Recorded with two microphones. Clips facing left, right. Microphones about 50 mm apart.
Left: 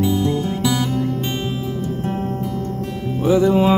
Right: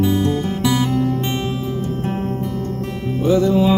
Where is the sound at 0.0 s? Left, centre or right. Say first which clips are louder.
Right 1 dB; right.